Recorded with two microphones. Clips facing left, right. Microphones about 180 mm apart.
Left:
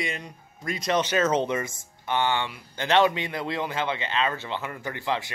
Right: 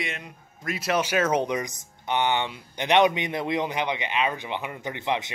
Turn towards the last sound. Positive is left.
turn(degrees=-20)  # may be behind; listen again after turning